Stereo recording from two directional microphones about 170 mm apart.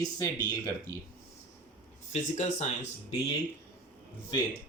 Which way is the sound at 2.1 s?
45° left (ahead or behind).